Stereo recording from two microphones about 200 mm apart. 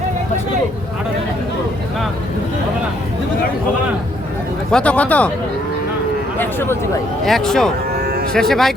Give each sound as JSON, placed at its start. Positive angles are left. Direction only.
{"t": 4.7, "sound": "speech", "side_deg": 5}
{"t": 6.4, "sound": "speech", "side_deg": 10}
{"t": 8.0, "sound": "cattle", "side_deg": -50}
{"t": 8.3, "sound": "speech", "side_deg": 0}